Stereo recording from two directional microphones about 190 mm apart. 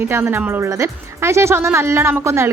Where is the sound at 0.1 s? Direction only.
10° right (ahead or behind).